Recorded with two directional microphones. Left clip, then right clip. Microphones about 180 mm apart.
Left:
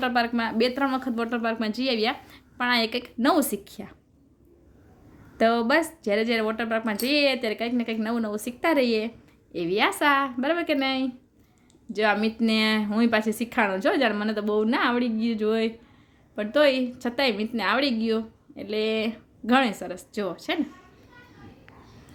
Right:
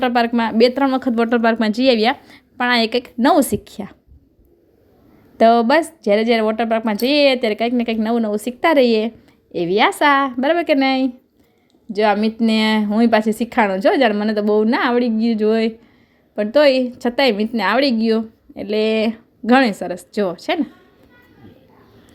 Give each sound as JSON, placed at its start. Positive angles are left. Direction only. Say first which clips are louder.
{"t": 0.0, "sound": "speech", "louder": "right 8 dB", "side_deg": -35}
{"t": 5.4, "sound": "a woman's voice", "louder": "right 9 dB", "side_deg": -30}